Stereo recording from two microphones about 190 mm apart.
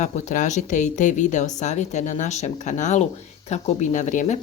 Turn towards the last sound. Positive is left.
turn(degrees=40)  # may be behind; listen again after turning